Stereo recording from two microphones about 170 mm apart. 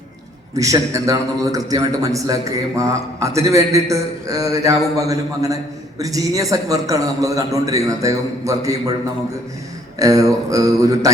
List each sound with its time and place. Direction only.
0.5 s a man's voice: 20° right (ahead or behind)
10.0 s a man's voice: 20° right (ahead or behind)